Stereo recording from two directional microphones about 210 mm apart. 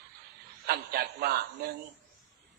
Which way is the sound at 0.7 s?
50° right (ahead or behind).